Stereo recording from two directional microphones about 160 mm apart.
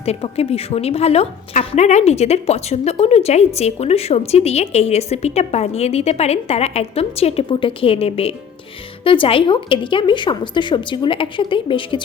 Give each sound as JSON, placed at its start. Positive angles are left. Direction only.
{"t": 0.0, "sound": "a woman's voice", "side_deg": 40}